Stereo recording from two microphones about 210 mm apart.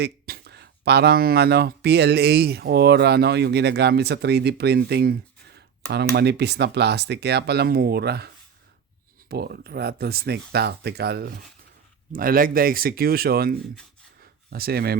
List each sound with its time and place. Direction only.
0.0 s speech: 50° right (ahead or behind)
9.3 s speech: 50° right (ahead or behind)
14.2 s a sound: 45° right (ahead or behind)